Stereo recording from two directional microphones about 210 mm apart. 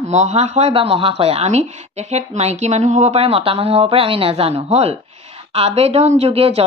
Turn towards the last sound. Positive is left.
turn(degrees=-30)  # may be behind; listen again after turning